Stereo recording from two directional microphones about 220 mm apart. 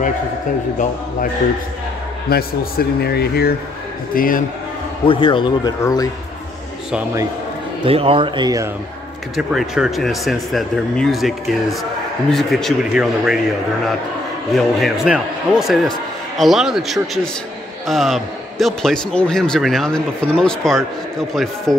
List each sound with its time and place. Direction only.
2.2 s a man's voice: 45° left (ahead or behind)
5.0 s speech: 25° left (ahead or behind)
6.9 s a man's voice: 5° right (ahead or behind)
7.8 s speech: 25° right (ahead or behind)
9.4 s a man's voice: 5° right (ahead or behind)
14.5 s a man's voice: centre (ahead or behind)